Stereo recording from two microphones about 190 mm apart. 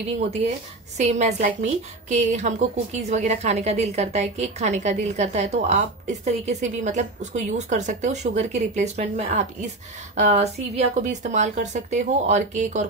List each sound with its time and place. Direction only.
0.9 s a woman's voice: 35° right (ahead or behind)